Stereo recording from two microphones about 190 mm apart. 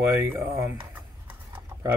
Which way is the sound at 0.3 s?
10° right (ahead or behind).